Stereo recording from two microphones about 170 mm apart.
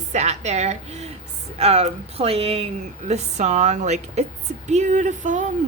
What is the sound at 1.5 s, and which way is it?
Speech, 35° right (ahead or behind).